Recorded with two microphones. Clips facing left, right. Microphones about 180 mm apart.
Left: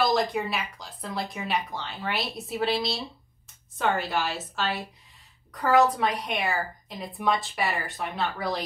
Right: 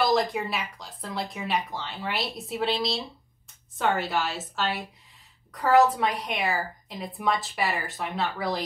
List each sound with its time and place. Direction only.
0.0 s a woman's voice: centre (ahead or behind)